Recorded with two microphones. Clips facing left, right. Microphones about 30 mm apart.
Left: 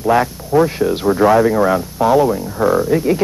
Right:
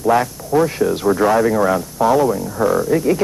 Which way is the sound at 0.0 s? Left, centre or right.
Centre.